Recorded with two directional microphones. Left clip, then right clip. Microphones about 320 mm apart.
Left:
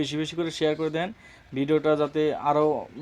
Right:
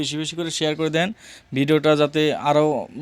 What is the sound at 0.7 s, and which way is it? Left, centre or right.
Speech, right.